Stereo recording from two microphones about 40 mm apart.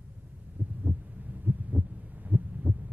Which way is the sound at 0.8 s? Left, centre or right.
Right.